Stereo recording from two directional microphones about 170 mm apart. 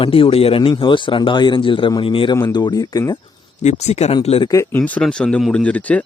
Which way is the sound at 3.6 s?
40° left (ahead or behind).